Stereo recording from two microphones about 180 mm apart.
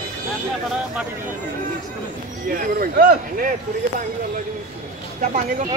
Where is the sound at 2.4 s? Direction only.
50° right (ahead or behind).